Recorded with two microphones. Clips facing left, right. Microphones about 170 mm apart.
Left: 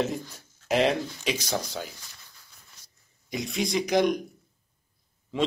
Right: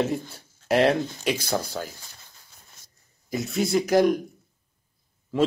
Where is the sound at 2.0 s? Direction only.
45° right (ahead or behind).